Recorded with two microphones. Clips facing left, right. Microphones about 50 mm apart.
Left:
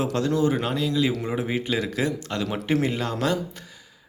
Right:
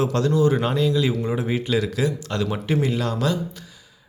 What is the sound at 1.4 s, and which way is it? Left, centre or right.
Speech, centre.